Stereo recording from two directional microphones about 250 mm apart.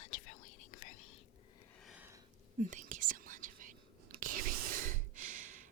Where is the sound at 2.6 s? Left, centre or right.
Right.